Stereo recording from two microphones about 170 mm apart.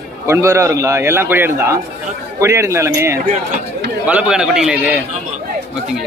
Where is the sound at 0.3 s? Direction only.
15° right (ahead or behind).